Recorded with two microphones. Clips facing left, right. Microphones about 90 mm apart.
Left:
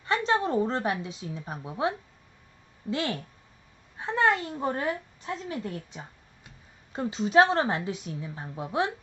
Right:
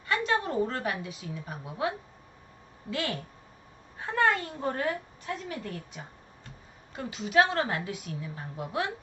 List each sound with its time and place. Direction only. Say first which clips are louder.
0.0 s a sound: left 3 dB; 30° left (ahead or behind)
1.0 s a woman's voice: left 2 dB; 25° left (ahead or behind)
2.9 s a woman's voice: left 3 dB; 25° left (ahead or behind)